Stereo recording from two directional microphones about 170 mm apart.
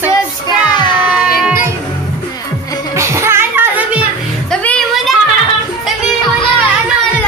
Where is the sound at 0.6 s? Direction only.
25° left (ahead or behind).